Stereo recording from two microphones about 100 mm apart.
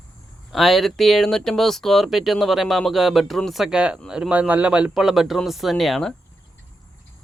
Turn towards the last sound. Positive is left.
turn(degrees=0)  # may be behind; listen again after turning